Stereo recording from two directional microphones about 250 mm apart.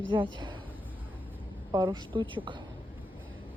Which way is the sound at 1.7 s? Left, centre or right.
Centre.